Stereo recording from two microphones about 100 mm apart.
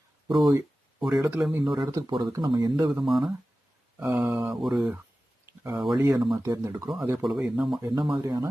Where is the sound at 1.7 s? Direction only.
50° right (ahead or behind).